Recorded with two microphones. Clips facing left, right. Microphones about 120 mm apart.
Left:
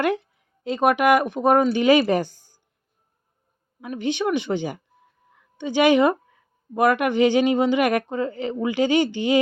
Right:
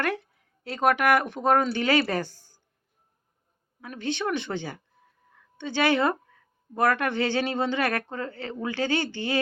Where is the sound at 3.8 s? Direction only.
15° left (ahead or behind).